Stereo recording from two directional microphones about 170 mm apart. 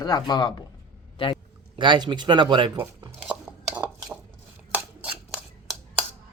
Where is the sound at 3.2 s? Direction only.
5° right (ahead or behind).